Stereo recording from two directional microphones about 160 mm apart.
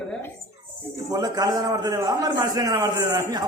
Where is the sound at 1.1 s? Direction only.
25° right (ahead or behind).